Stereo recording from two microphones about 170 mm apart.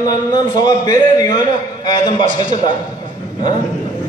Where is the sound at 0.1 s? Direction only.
25° left (ahead or behind).